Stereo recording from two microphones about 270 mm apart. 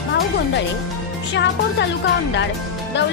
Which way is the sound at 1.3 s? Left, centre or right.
Left.